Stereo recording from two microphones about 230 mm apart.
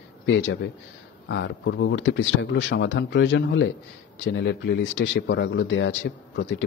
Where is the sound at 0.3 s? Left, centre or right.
Left.